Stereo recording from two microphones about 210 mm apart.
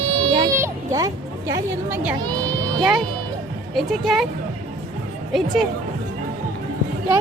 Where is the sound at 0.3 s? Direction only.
25° right (ahead or behind).